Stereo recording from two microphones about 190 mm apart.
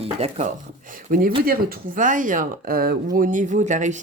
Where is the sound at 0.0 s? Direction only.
35° right (ahead or behind).